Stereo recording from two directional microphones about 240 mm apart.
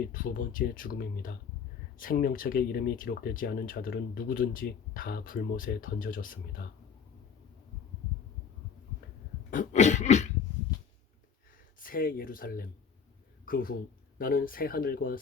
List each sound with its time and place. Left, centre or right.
0.1 s speech: left
9.5 s cough: left
11.8 s speech: left